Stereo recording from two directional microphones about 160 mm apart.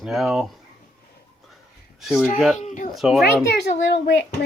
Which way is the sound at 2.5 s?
50° left (ahead or behind).